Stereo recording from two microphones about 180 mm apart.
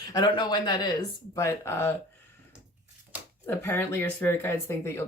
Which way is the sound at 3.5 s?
15° left (ahead or behind).